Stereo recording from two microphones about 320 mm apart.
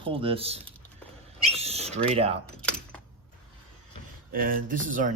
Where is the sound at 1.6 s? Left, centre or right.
Centre.